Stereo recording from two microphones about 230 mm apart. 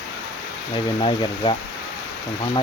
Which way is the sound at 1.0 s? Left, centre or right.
Left.